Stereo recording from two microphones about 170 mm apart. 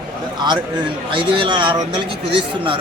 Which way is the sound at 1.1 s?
30° right (ahead or behind).